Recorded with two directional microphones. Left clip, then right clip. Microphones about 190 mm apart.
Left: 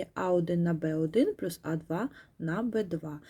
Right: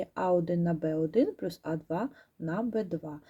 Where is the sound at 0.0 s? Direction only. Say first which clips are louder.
Right 1 dB; 20° left (ahead or behind).